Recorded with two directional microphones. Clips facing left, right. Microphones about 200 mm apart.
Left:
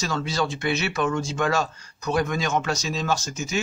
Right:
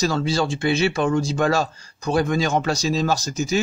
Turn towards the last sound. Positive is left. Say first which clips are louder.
# right 4 dB
turn(degrees=-35)  # may be behind; listen again after turning